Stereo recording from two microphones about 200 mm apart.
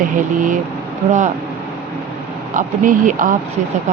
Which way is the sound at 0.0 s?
40° right (ahead or behind).